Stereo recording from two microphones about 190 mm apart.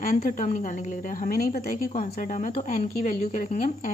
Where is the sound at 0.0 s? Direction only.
50° left (ahead or behind).